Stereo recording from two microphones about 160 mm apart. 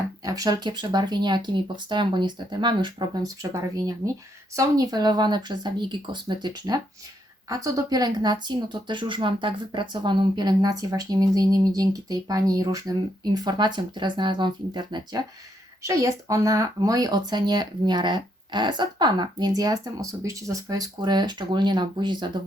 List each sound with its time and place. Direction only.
0.3 s speech: 25° right (ahead or behind)